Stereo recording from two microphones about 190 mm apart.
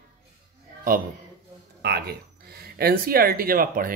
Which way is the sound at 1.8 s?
60° right (ahead or behind).